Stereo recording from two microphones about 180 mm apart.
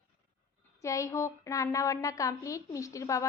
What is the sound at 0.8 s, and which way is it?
Speech, 15° left (ahead or behind).